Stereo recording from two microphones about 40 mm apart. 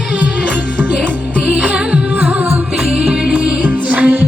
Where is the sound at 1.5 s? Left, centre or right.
Right.